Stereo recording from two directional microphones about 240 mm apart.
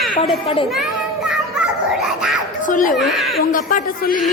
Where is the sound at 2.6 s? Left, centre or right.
Left.